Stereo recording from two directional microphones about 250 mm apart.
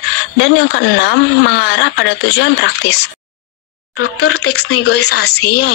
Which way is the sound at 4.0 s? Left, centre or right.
Left.